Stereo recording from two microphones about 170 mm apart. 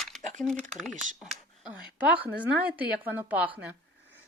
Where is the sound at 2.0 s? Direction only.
10° right (ahead or behind).